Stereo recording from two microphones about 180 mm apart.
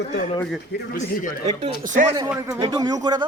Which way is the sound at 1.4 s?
40° right (ahead or behind).